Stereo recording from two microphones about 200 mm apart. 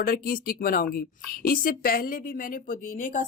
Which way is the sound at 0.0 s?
45° left (ahead or behind).